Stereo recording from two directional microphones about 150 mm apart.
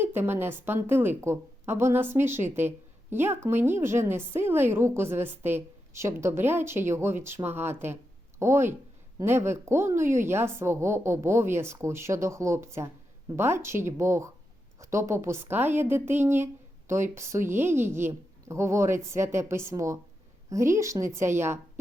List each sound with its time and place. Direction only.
0.0 s a woman's voice: 15° right (ahead or behind)